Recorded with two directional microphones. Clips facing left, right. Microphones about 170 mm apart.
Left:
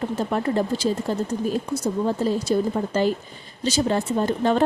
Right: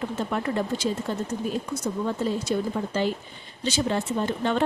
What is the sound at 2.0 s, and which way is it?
Speech, 35° left (ahead or behind).